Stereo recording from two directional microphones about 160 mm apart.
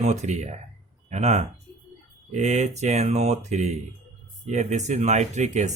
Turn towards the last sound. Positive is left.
turn(degrees=-45)  # may be behind; listen again after turning